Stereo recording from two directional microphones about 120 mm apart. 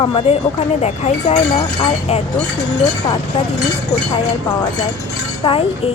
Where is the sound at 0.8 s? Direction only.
65° left (ahead or behind).